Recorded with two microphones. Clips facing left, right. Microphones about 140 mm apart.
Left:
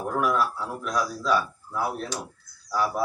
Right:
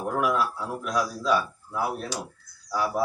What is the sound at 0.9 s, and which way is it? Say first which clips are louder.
Speech: even; 10° right (ahead or behind).